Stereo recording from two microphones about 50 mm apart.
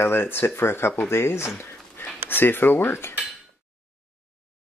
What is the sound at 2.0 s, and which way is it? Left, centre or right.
Speech, left.